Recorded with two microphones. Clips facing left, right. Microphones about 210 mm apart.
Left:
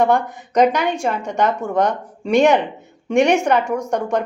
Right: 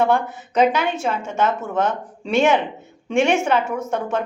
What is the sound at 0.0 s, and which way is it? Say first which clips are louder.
A woman's voice: left 2 dB; 15° left (ahead or behind).